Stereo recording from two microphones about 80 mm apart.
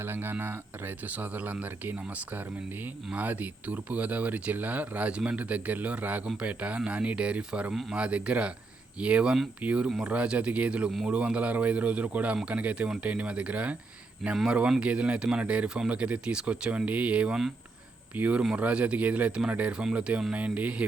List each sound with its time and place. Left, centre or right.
0.0 s speech: right
7.7 s speech: centre